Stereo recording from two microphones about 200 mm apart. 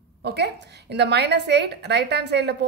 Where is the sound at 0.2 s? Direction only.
55° right (ahead or behind).